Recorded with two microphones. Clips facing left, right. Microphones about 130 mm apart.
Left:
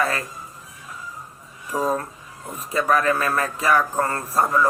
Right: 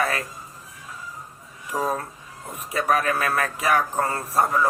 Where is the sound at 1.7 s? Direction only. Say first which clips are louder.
Left 3 dB; centre (ahead or behind).